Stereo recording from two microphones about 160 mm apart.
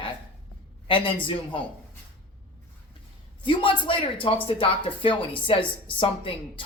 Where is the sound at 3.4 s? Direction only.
30° left (ahead or behind).